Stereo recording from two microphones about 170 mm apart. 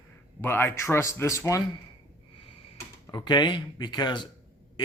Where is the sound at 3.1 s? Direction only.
25° left (ahead or behind).